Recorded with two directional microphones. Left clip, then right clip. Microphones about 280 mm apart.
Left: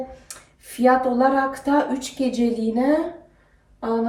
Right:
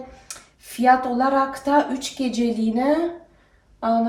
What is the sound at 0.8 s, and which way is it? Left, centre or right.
A woman's voice, centre.